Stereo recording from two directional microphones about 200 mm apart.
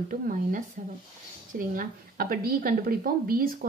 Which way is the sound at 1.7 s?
45° right (ahead or behind).